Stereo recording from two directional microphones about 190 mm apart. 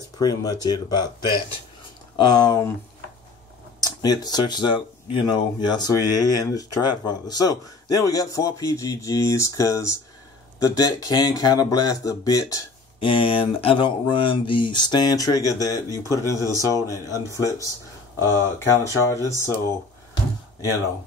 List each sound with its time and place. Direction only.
0.2 s speech: 20° left (ahead or behind)
2.1 s speech: 20° left (ahead or behind)
3.8 s speech: 20° left (ahead or behind)